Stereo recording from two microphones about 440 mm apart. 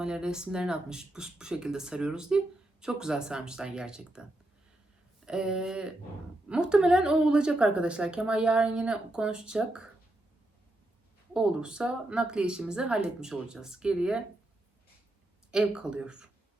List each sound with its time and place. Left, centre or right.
0.0 s a woman's voice: centre
11.3 s a woman's voice: centre
15.5 s a woman's voice: centre